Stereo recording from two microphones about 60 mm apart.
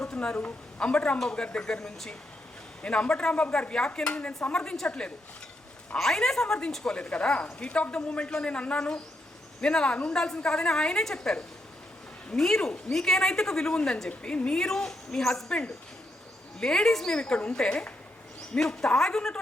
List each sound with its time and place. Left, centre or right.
0.0 s a woman's voice: centre
17.2 s a woman's voice: centre